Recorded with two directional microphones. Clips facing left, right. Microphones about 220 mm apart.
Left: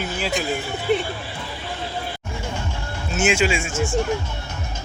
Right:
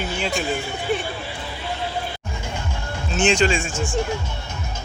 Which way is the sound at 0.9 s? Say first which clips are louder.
Left 4 dB; 20° left (ahead or behind).